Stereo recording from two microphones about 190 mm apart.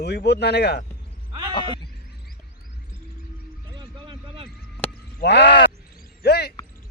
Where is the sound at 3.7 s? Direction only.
25° right (ahead or behind).